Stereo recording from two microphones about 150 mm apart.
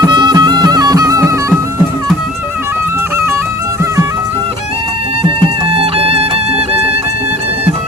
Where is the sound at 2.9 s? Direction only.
15° right (ahead or behind).